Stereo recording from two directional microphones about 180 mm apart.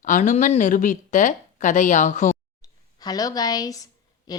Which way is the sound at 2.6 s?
20° left (ahead or behind).